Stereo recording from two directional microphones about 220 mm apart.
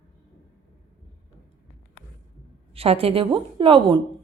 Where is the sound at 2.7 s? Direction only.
25° right (ahead or behind).